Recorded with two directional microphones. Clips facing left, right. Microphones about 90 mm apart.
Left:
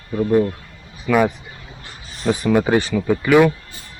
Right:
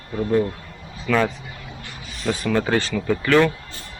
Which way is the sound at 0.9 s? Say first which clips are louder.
Left 4 dB; 15° left (ahead or behind).